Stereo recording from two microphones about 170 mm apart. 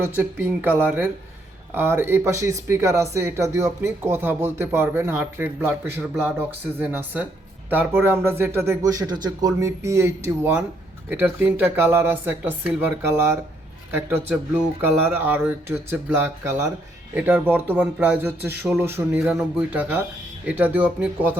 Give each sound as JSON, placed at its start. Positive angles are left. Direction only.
{"t": 0.0, "sound": "speech", "side_deg": -15}
{"t": 13.9, "sound": "speech", "side_deg": -10}
{"t": 19.2, "sound": "speech", "side_deg": -5}